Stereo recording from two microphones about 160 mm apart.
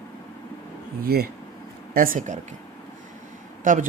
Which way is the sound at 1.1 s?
75° right (ahead or behind).